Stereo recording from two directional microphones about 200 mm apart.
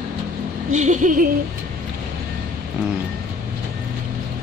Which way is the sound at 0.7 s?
35° right (ahead or behind).